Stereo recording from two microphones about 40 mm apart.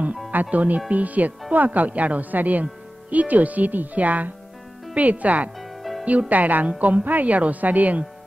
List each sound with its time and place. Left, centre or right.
0.3 s speech: right
5.6 s music: centre
6.0 s speech: right